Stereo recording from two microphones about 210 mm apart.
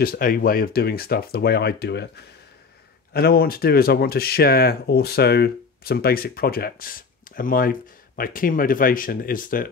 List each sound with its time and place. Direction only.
0.0 s speech: 45° left (ahead or behind)